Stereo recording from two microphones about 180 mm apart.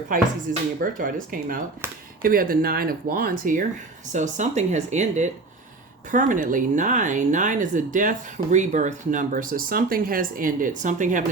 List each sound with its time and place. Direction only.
0.8 s speech: 50° right (ahead or behind)